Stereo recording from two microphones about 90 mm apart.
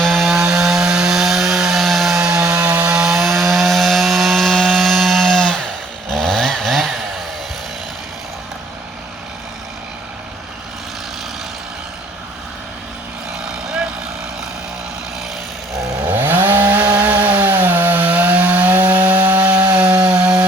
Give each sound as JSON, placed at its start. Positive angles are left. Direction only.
{"t": 0.0, "sound": "chainsaw", "side_deg": 0}
{"t": 2.9, "sound": "wood", "side_deg": -5}
{"t": 6.1, "sound": "chainsaw", "side_deg": 5}
{"t": 13.7, "sound": "vehicle", "side_deg": -10}
{"t": 16.0, "sound": "chainsaw", "side_deg": -20}